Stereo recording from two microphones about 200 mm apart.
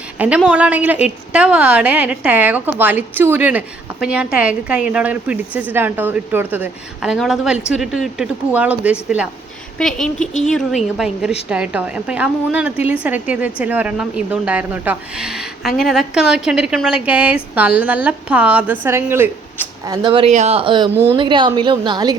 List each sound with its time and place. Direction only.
0.2 s a woman's voice: 5° right (ahead or behind)